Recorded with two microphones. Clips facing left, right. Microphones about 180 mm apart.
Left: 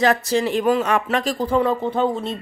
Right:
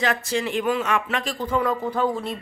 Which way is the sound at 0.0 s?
40° left (ahead or behind).